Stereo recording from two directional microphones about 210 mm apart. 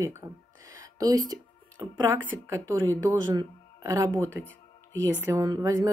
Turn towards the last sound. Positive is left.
turn(degrees=-15)  # may be behind; listen again after turning